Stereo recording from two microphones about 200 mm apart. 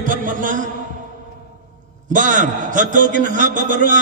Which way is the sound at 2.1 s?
40° right (ahead or behind).